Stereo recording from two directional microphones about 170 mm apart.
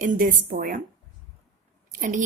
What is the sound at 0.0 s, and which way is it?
Speech, 50° right (ahead or behind).